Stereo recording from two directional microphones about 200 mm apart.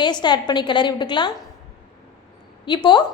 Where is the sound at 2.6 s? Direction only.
25° left (ahead or behind).